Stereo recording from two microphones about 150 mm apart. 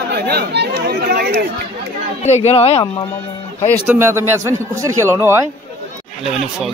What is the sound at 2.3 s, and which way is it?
Speech, 45° left (ahead or behind).